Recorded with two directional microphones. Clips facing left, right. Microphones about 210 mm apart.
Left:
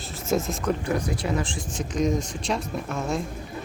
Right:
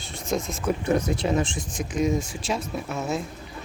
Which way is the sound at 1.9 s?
5° right (ahead or behind).